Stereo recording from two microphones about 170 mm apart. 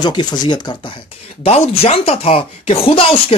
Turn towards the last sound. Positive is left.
turn(degrees=30)  # may be behind; listen again after turning